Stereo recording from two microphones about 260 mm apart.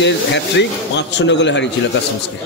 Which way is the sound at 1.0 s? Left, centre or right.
Left.